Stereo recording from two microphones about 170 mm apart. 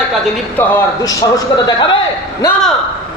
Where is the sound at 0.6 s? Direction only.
15° left (ahead or behind).